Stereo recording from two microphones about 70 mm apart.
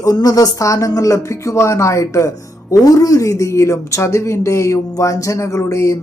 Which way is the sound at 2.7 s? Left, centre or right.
Left.